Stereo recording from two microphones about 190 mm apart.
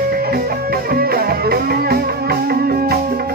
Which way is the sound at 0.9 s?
55° right (ahead or behind).